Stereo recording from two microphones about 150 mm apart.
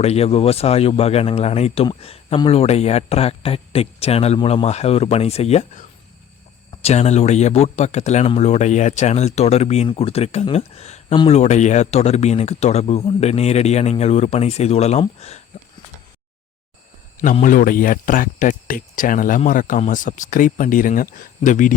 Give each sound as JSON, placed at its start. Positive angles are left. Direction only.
{"t": 0.0, "sound": "speech", "side_deg": 45}
{"t": 6.8, "sound": "speech", "side_deg": 45}
{"t": 15.5, "sound": "a sound", "side_deg": 45}
{"t": 17.4, "sound": "speech", "side_deg": 65}